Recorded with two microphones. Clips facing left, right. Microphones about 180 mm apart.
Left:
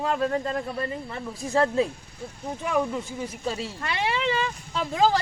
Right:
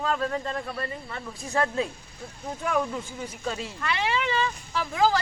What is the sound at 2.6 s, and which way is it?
Speech, 15° left (ahead or behind).